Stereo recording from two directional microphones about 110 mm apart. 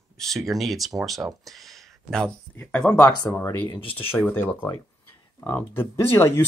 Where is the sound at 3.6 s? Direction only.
50° left (ahead or behind).